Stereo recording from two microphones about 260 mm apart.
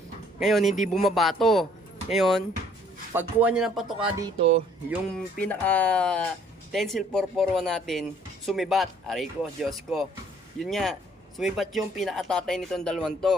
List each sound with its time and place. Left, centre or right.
0.3 s speech: centre
4.2 s speech: right
5.4 s speech: centre